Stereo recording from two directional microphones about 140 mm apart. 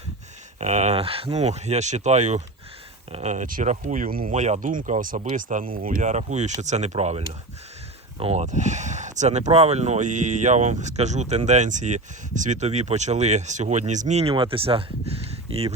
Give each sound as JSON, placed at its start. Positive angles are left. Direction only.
{"t": 0.6, "sound": "speech", "side_deg": -55}